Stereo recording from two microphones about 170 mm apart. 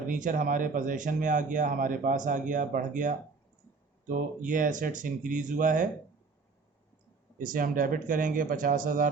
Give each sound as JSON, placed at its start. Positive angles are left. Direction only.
{"t": 0.1, "sound": "speech", "side_deg": -50}
{"t": 7.3, "sound": "speech", "side_deg": -55}